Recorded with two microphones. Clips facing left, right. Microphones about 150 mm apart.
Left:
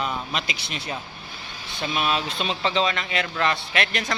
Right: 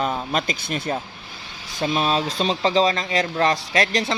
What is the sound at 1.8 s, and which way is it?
Speech, 35° right (ahead or behind).